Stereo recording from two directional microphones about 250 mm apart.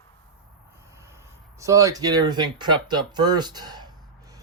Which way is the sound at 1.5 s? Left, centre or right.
Centre.